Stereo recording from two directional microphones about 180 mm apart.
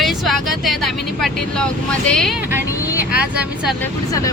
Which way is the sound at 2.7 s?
15° left (ahead or behind).